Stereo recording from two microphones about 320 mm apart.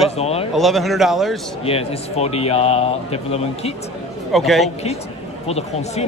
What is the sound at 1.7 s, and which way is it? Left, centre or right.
Speech, centre.